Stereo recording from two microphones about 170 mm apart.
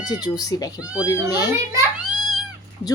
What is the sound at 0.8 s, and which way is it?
Speech, 5° right (ahead or behind).